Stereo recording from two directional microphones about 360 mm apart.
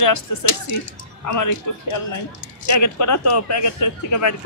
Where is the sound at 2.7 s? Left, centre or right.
Left.